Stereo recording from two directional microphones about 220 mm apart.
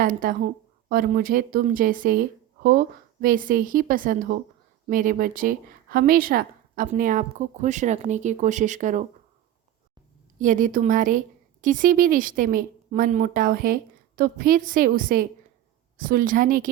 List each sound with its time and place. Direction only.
0.0 s speech: 40° right (ahead or behind)
10.4 s speech: 35° right (ahead or behind)